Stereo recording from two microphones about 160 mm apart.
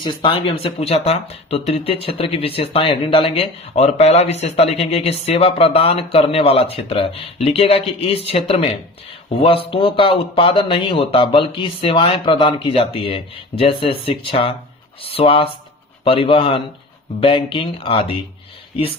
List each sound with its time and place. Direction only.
0.0 s speech: 30° left (ahead or behind)